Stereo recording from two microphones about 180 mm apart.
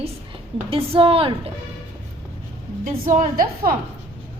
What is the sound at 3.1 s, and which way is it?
Speech, 50° right (ahead or behind).